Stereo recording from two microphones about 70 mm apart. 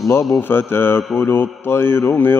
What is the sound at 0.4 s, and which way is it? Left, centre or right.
Mantra, left.